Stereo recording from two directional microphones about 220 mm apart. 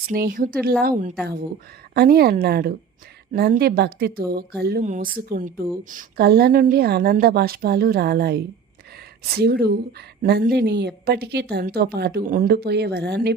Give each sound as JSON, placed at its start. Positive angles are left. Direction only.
{"t": 0.0, "sound": "a woman's voice", "side_deg": -40}